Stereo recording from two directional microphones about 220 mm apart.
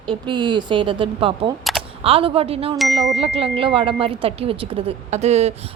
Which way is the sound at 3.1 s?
25° right (ahead or behind).